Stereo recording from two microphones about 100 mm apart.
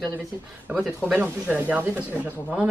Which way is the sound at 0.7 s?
15° right (ahead or behind).